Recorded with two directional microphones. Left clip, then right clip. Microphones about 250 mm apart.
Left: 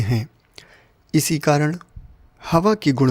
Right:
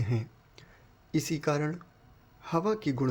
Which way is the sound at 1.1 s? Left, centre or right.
Left.